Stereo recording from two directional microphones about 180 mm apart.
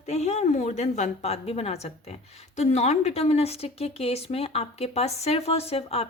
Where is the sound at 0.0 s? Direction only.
40° left (ahead or behind).